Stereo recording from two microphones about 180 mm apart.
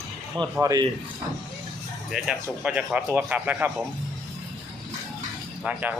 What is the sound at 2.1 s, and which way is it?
Speech, 5° right (ahead or behind).